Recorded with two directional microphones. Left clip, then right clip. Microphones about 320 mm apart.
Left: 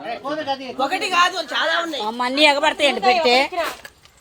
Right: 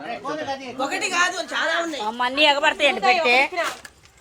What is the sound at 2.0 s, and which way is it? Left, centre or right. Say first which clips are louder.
A woman's voice: left 2 dB; left.